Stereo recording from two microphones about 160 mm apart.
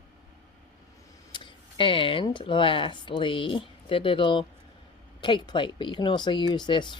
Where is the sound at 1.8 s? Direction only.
30° left (ahead or behind).